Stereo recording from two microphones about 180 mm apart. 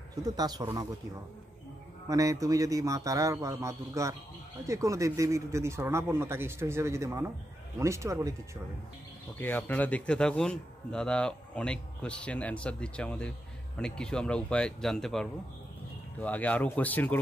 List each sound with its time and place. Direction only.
0.1 s a man's voice: 20° right (ahead or behind)
2.0 s a man's voice: 20° right (ahead or behind)
9.4 s a man's voice: 10° left (ahead or behind)